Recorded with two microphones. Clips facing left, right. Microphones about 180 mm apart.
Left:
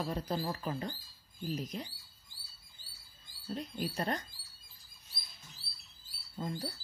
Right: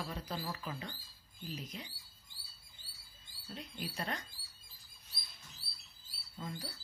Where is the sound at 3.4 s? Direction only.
40° left (ahead or behind).